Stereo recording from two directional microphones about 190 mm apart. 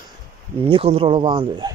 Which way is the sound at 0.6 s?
30° right (ahead or behind).